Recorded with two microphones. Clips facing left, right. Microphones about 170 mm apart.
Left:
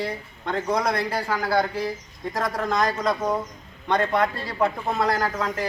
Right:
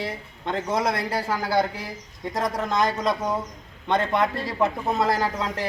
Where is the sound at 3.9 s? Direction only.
25° right (ahead or behind).